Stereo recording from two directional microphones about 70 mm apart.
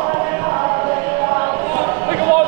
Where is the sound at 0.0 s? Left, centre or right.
Right.